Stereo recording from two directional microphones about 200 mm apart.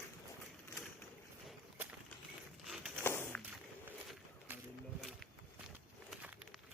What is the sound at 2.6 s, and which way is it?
Walk, centre (ahead or behind).